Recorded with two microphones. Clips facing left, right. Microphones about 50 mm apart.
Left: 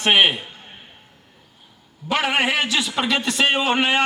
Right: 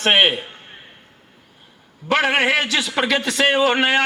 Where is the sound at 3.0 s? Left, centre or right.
Right.